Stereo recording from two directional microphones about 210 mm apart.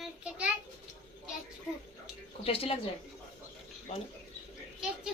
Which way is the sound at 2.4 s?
25° left (ahead or behind).